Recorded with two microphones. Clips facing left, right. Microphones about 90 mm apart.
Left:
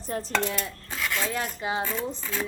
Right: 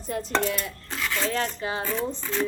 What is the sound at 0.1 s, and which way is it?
Dishes, 35° left (ahead or behind).